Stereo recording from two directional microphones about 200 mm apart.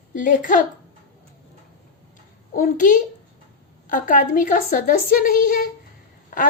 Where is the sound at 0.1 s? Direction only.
45° left (ahead or behind).